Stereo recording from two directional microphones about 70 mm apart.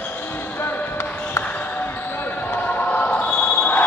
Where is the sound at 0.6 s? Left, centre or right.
Left.